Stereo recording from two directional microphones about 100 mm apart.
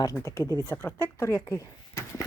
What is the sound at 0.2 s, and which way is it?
Speech, 30° left (ahead or behind).